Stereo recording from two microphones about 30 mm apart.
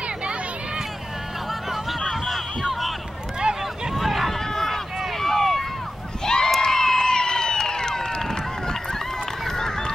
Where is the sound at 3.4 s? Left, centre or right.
Right.